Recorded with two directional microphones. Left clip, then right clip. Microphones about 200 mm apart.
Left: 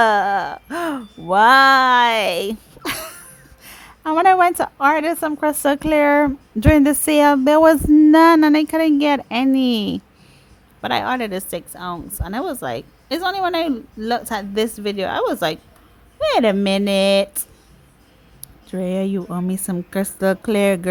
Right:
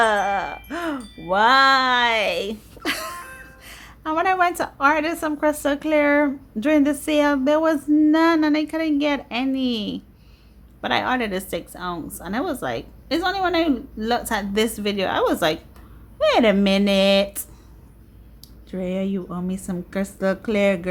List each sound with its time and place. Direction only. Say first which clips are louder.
0.0 s music: left 4 dB; 50° left (ahead or behind)
1.3 s a woman's voice: left 4 dB; 50° left (ahead or behind)
18.7 s a woman's voice: left 4 dB; 50° left (ahead or behind)